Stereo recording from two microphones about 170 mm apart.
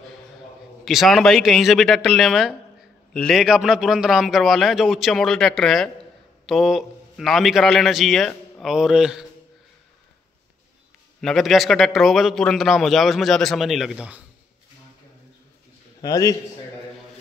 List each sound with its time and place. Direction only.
0.8 s a man's voice: centre (ahead or behind)
11.1 s a man's voice: centre (ahead or behind)
16.0 s a man's voice: 20° left (ahead or behind)